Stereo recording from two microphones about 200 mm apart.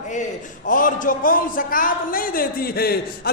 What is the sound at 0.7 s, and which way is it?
A man's voice, 40° left (ahead or behind).